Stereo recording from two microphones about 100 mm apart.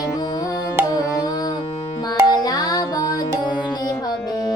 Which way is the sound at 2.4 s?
40° left (ahead or behind).